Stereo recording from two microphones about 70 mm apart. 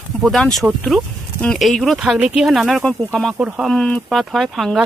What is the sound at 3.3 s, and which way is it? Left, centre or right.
Speech, centre.